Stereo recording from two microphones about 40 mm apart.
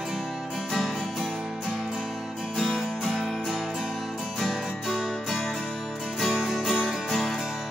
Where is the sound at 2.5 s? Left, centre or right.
Centre.